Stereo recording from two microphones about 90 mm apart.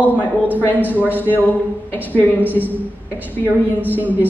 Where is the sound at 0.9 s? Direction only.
20° left (ahead or behind).